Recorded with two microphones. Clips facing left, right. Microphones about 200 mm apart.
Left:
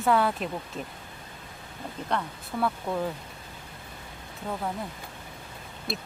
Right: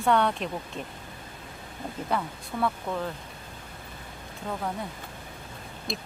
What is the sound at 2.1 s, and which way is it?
Speech, 5° right (ahead or behind).